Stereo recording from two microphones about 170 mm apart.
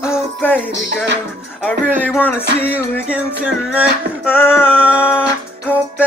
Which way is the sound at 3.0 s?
5° right (ahead or behind).